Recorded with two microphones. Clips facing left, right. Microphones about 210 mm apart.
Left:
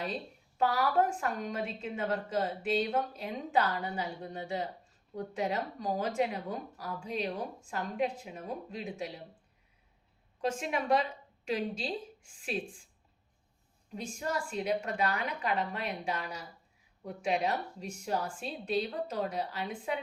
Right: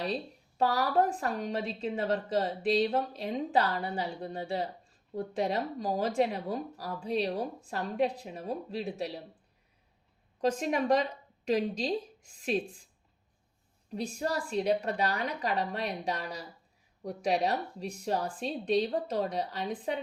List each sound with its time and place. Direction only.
0.6 s a woman's voice: 35° right (ahead or behind)
10.4 s speech: 40° right (ahead or behind)
13.9 s a woman's voice: 35° right (ahead or behind)